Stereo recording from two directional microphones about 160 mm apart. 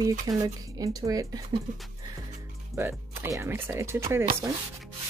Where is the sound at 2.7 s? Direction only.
15° right (ahead or behind).